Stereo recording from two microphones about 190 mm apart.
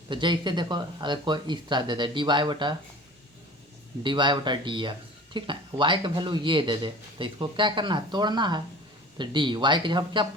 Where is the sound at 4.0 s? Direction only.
25° right (ahead or behind).